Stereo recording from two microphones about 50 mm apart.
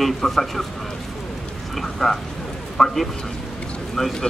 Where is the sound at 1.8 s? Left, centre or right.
Centre.